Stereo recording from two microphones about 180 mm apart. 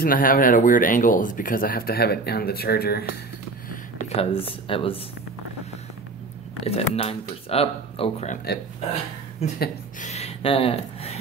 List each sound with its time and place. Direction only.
0.0 s speech: 50° left (ahead or behind)
4.1 s speech: 35° left (ahead or behind)
6.6 s speech: 35° left (ahead or behind)
9.6 s speech: 45° left (ahead or behind)